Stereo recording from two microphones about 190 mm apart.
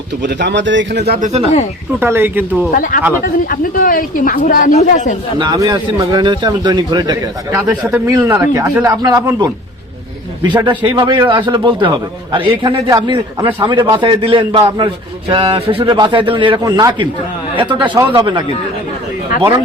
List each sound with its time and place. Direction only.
0.2 s speech: 65° right (ahead or behind)
2.0 s speech: 10° right (ahead or behind)
2.7 s speech: 45° left (ahead or behind)
5.4 s a man's voice: 25° right (ahead or behind)
9.0 s a man's voice: 20° right (ahead or behind)